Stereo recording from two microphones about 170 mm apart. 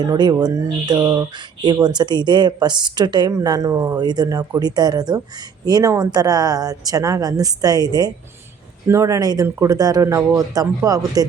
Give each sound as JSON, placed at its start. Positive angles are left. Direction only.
{"t": 0.0, "sound": "speech", "side_deg": -25}